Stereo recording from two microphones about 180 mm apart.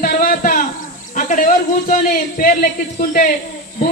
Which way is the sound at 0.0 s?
50° left (ahead or behind).